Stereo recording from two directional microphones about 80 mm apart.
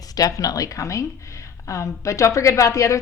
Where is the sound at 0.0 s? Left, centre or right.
Left.